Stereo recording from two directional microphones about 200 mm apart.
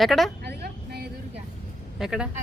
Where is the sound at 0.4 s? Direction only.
55° right (ahead or behind).